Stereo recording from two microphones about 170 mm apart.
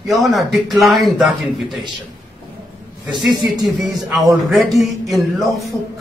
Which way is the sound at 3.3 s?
25° right (ahead or behind).